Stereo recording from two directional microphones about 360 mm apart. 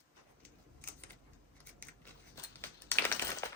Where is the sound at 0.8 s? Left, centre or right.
Centre.